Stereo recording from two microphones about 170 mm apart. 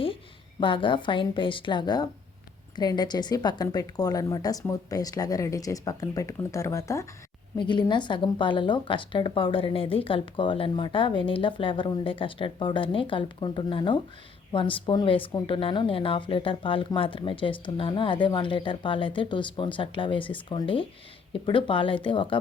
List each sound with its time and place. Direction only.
0.6 s speech: 30° left (ahead or behind)